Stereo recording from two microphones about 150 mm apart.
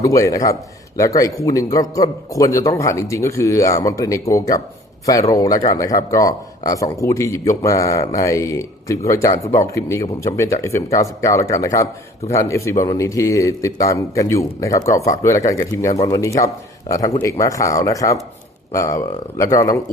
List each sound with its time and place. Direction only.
0.0 s a man's voice: 20° left (ahead or behind)